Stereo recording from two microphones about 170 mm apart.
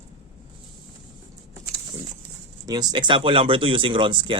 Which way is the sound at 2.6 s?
25° right (ahead or behind).